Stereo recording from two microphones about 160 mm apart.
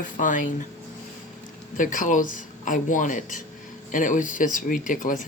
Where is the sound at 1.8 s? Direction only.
55° left (ahead or behind).